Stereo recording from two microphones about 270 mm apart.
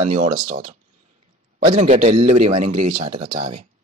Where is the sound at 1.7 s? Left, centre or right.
Right.